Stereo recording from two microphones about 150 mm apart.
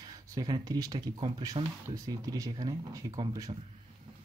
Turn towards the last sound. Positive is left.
turn(degrees=-25)  # may be behind; listen again after turning